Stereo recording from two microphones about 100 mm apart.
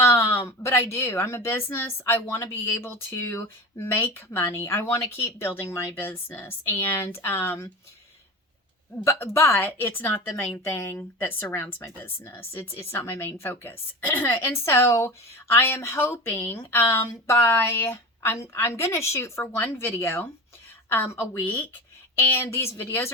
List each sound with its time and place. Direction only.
0.0 s a woman's voice: 25° left (ahead or behind)
9.0 s a woman's voice: 20° left (ahead or behind)